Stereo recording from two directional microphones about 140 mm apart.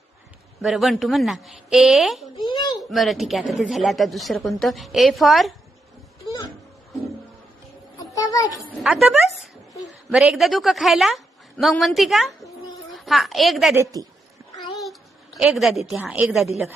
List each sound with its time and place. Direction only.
0.6 s a woman's voice: centre (ahead or behind)
2.3 s a child's voice: 30° left (ahead or behind)
2.9 s a woman's voice: centre (ahead or behind)
7.9 s a sound: 25° left (ahead or behind)
8.8 s a woman's voice: 5° right (ahead or behind)
13.7 s a woman's voice: 25° right (ahead or behind)
15.4 s a woman's voice: centre (ahead or behind)